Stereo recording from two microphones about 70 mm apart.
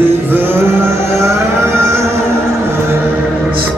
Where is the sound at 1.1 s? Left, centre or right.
Right.